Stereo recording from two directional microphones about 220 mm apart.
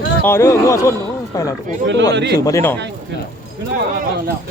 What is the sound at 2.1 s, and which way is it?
Speech, 50° right (ahead or behind).